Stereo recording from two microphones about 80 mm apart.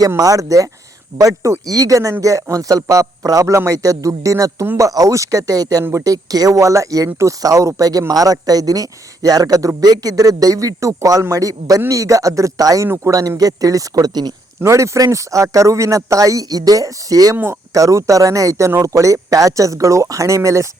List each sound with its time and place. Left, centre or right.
0.2 s speech: right
14.6 s speech: right
17.3 s speech: right
17.7 s speech: right